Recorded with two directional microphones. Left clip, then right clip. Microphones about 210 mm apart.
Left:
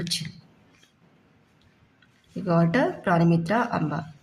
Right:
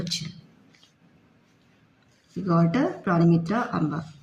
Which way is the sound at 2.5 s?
35° left (ahead or behind).